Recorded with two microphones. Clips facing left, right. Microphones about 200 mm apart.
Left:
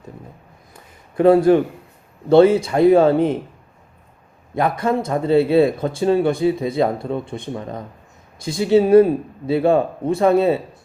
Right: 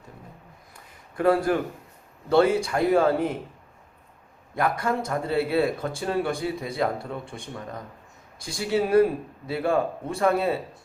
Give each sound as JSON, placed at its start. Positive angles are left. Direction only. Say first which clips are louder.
{"t": 0.7, "sound": "a sound", "louder": "left 4 dB", "side_deg": 25}
{"t": 2.3, "sound": "speech", "louder": "left 8 dB", "side_deg": 25}
{"t": 4.5, "sound": "speech", "louder": "left 6 dB", "side_deg": 25}